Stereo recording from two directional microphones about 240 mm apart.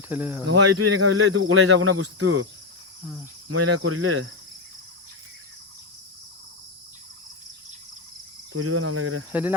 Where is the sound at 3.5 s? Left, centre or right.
Right.